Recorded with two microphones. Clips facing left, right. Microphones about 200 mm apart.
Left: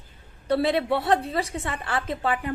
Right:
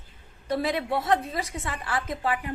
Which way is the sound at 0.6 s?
30° left (ahead or behind).